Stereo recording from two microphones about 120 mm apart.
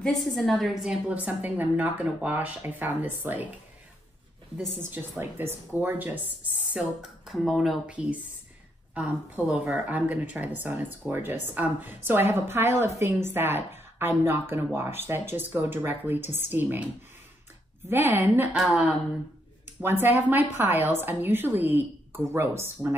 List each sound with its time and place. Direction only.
0.0 s a woman's voice: centre (ahead or behind); by 3.4 s 15° right (ahead or behind)
5.2 s a woman's voice: 15° right (ahead or behind)
6.7 s a woman's voice: 5° right (ahead or behind)
17.8 s speech: 20° right (ahead or behind)
18.6 s speech: 5° right (ahead or behind)
19.8 s a woman's voice: 15° right (ahead or behind)